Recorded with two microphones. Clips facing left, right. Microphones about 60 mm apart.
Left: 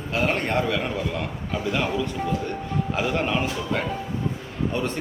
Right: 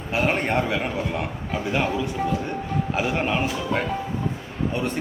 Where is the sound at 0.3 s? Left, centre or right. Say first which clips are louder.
Right 1 dB; centre.